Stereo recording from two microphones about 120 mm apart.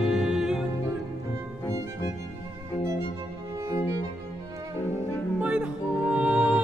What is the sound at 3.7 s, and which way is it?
Cello, 25° right (ahead or behind).